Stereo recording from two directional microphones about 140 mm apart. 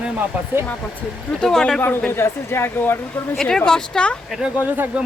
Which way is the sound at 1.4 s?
5° left (ahead or behind).